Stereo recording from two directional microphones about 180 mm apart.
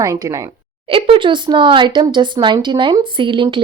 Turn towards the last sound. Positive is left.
turn(degrees=-30)  # may be behind; listen again after turning